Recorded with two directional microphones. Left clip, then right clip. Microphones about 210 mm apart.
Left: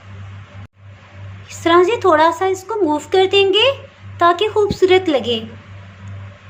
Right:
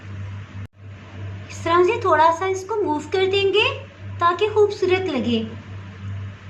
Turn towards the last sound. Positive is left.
turn(degrees=50)  # may be behind; listen again after turning